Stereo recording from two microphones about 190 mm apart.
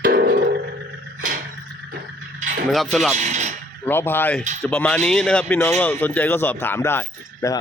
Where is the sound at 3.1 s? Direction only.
40° right (ahead or behind).